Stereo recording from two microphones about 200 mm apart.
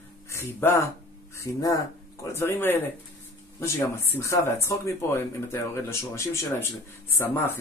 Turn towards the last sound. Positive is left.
turn(degrees=10)  # may be behind; listen again after turning